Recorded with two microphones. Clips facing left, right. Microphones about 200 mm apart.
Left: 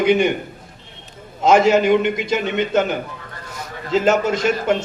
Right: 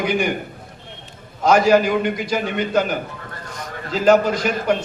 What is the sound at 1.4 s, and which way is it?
A man's voice, 25° left (ahead or behind).